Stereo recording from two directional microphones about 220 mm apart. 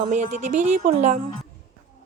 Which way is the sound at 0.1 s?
35° right (ahead or behind).